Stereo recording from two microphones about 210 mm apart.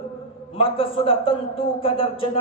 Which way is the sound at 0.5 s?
25° left (ahead or behind).